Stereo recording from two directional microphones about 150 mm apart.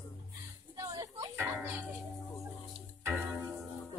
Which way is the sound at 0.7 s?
25° right (ahead or behind).